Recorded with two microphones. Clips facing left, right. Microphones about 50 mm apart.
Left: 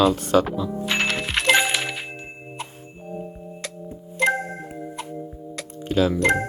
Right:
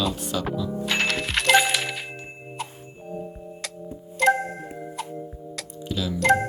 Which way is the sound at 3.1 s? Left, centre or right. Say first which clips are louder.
Left 1 dB; centre.